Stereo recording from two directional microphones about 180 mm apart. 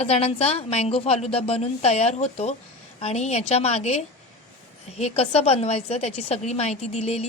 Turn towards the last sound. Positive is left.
turn(degrees=35)  # may be behind; listen again after turning